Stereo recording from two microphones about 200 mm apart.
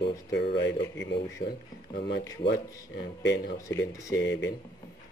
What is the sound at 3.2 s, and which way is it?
Speech, 55° left (ahead or behind).